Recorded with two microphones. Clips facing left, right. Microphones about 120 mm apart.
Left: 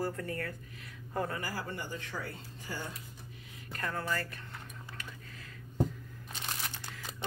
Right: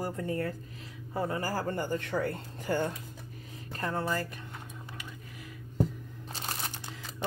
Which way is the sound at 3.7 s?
25° right (ahead or behind).